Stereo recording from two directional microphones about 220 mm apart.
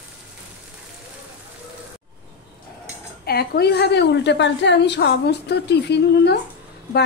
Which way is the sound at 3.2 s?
45° left (ahead or behind).